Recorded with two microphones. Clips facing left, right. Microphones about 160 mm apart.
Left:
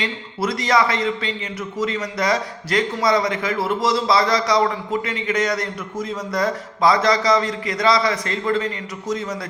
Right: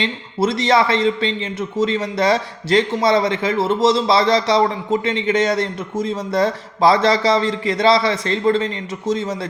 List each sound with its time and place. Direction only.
0.0 s a man's voice: 25° right (ahead or behind)